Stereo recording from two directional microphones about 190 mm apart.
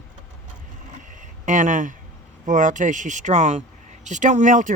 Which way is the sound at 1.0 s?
45° right (ahead or behind).